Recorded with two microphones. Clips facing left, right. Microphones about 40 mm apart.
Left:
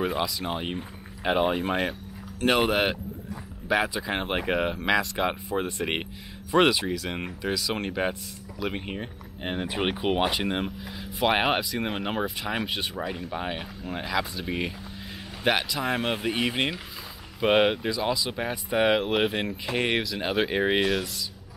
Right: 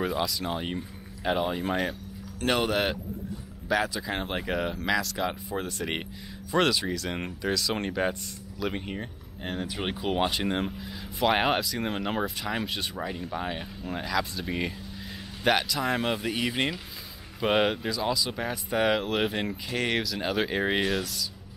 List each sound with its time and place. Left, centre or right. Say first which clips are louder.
0.2 s speech: left 1 dB; centre
0.7 s speech: left 1 dB; left; by 21.1 s centre